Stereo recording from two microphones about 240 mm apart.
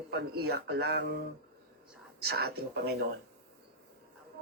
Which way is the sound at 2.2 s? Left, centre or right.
Right.